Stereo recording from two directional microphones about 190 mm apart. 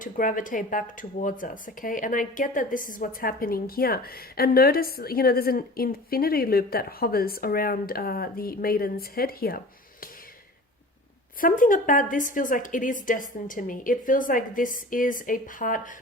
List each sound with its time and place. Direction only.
0.0 s speech: 45° left (ahead or behind)
11.3 s speech: 45° left (ahead or behind)